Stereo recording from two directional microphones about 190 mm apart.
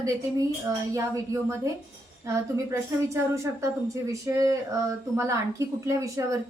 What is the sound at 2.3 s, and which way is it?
A woman's voice, 15° right (ahead or behind).